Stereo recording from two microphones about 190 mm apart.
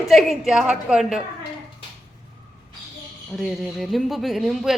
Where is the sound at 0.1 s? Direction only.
Centre (ahead or behind).